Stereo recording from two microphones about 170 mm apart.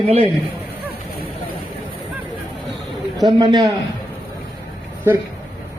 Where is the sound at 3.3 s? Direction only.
25° right (ahead or behind).